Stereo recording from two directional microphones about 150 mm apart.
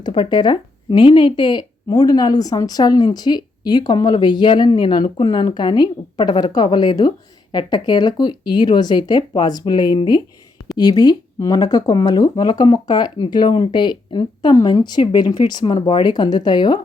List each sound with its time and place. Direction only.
0.0 s speech: 30° left (ahead or behind)